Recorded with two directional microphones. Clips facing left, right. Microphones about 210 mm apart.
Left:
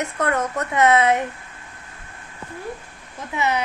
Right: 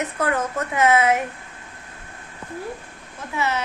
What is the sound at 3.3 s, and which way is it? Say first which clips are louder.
Speech: left 2 dB; 15° left (ahead or behind).